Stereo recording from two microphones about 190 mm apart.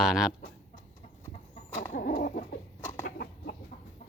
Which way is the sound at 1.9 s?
45° left (ahead or behind).